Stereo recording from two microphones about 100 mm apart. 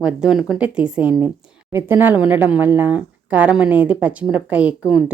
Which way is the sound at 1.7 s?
20° right (ahead or behind).